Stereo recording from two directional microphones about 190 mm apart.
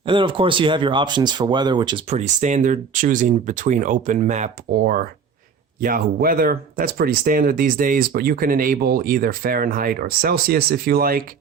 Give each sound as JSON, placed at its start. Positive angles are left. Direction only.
{"t": 0.0, "sound": "speech", "side_deg": -25}
{"t": 2.0, "sound": "speech", "side_deg": -40}